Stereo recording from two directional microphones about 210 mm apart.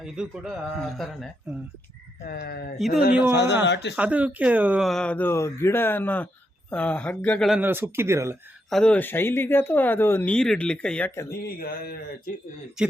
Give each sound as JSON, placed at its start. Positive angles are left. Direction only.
{"t": 0.0, "sound": "speech", "side_deg": 0}
{"t": 2.2, "sound": "speech", "side_deg": 45}
{"t": 2.7, "sound": "speech", "side_deg": 0}
{"t": 3.3, "sound": "a man's voice", "side_deg": 55}
{"t": 3.9, "sound": "speech", "side_deg": -5}
{"t": 8.7, "sound": "speech", "side_deg": 5}
{"t": 11.3, "sound": "speech", "side_deg": 45}